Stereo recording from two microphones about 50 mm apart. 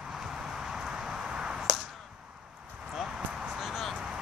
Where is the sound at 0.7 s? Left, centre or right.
Centre.